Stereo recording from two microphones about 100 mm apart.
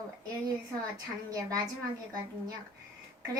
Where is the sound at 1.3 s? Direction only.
35° right (ahead or behind).